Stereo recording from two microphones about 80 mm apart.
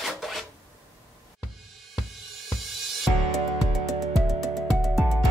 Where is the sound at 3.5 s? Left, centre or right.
Centre.